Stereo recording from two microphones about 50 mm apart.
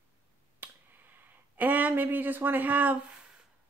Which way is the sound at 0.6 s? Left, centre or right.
Right.